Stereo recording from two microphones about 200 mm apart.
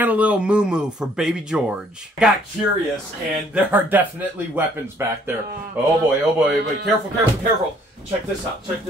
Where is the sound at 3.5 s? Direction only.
10° right (ahead or behind).